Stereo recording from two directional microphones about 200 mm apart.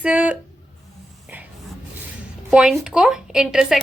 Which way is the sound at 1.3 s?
10° right (ahead or behind).